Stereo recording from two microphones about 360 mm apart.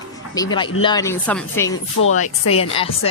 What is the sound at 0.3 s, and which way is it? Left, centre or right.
Speech, centre.